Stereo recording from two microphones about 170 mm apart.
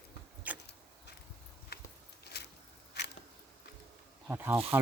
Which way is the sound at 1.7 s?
70° left (ahead or behind).